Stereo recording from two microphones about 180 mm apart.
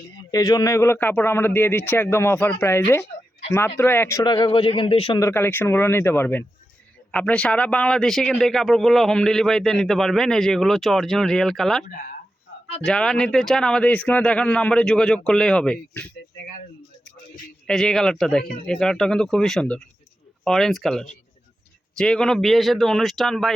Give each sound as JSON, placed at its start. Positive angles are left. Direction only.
{"t": 0.1, "sound": "speech", "side_deg": 20}
{"t": 4.2, "sound": "a man's voice", "side_deg": 25}
{"t": 5.2, "sound": "speech", "side_deg": 15}
{"t": 17.7, "sound": "speech", "side_deg": 5}